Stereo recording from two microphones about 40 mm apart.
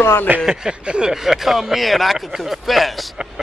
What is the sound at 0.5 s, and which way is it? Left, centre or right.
Speech, centre.